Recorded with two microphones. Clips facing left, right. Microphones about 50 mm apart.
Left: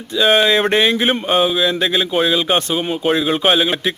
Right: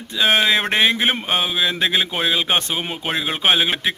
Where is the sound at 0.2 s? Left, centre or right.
Centre.